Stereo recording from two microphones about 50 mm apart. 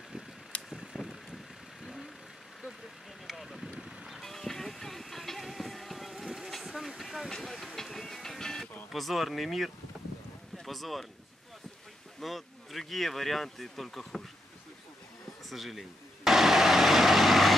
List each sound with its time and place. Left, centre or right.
0.5 s vehicle: left
0.9 s vehicle: centre
3.3 s vehicle: centre
4.2 s music: centre
8.9 s speech: centre
10.5 s a sound: centre
12.2 s speech: centre
15.5 s vehicle: centre